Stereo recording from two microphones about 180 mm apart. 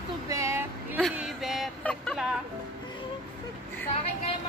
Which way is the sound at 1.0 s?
Centre (ahead or behind).